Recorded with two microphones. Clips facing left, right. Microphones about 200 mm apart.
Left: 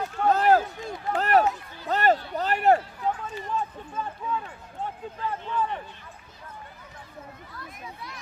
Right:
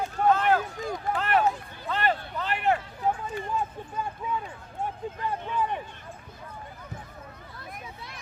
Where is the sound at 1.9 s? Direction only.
40° left (ahead or behind).